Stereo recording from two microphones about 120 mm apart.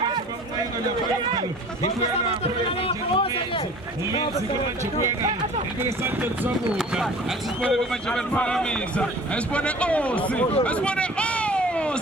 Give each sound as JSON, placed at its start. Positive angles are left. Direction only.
{"t": 2.4, "sound": "speech", "side_deg": 50}
{"t": 5.8, "sound": "speech", "side_deg": -20}
{"t": 6.7, "sound": "a man's voice", "side_deg": 0}
{"t": 10.6, "sound": "a sound", "side_deg": 10}